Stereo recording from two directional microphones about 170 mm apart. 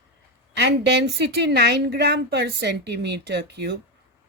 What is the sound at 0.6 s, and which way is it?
A woman's voice, 85° right.